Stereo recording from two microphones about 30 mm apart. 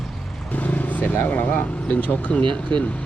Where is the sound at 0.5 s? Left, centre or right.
Left.